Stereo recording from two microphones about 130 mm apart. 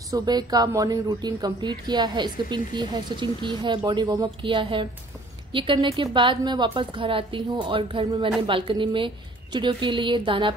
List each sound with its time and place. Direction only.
0.1 s a woman's voice: 30° right (ahead or behind)